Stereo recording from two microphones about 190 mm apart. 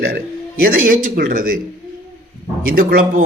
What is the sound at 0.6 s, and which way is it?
Speech, 45° right (ahead or behind).